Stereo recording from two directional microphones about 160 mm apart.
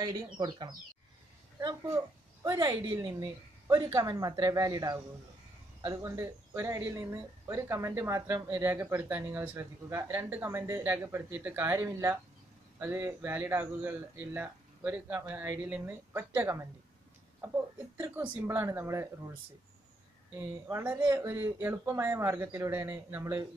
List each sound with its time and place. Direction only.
0.0 s a woman's voice: 25° right (ahead or behind)
17.9 s speech: 15° right (ahead or behind)
20.6 s speech: 15° right (ahead or behind)